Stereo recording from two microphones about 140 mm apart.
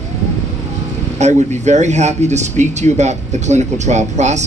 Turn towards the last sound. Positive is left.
turn(degrees=-55)  # may be behind; listen again after turning